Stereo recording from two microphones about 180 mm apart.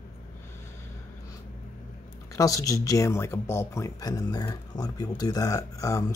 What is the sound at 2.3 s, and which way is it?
Speech, 20° left (ahead or behind).